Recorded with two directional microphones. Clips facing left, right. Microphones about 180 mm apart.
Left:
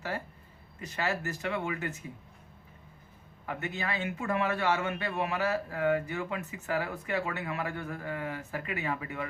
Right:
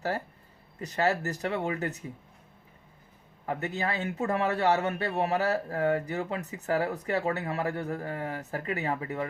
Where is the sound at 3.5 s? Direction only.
35° right (ahead or behind).